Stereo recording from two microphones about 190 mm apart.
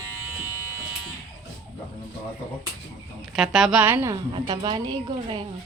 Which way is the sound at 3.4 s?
Centre (ahead or behind).